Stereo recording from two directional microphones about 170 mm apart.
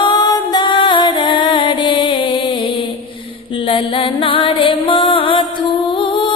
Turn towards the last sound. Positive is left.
turn(degrees=30)  # may be behind; listen again after turning